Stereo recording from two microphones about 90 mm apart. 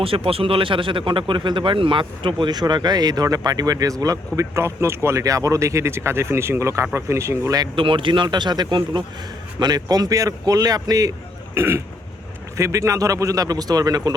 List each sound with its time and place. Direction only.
0.0 s speech: 90° right; by 7.6 s 30° right (ahead or behind)
7.8 s a man's voice: 70° right (ahead or behind); by 11.1 s 40° right (ahead or behind)
11.5 s speech: 30° right (ahead or behind); by 14.1 s 45° right (ahead or behind)